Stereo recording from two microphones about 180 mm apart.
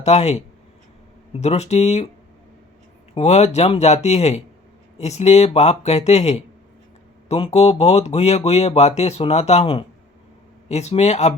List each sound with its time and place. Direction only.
0.0 s speech: 35° left (ahead or behind)
3.2 s speech: 35° left (ahead or behind)